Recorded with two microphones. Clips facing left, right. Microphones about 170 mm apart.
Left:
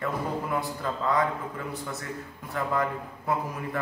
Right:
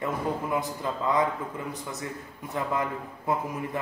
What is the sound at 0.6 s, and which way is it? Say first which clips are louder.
A man's voice: even; 20° right (ahead or behind).